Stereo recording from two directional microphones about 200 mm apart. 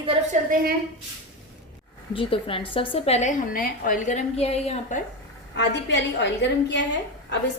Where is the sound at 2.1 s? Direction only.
25° left (ahead or behind).